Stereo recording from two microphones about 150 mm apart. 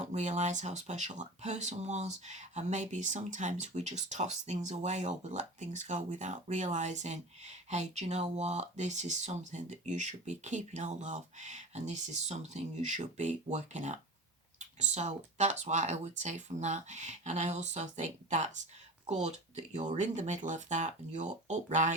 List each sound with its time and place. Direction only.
0.0 s speech: 50° right (ahead or behind)
19.7 s speech: 55° right (ahead or behind)